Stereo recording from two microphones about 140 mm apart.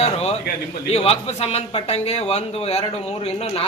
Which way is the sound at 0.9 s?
45° left (ahead or behind).